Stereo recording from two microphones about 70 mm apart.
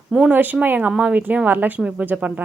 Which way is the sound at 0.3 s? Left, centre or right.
Right.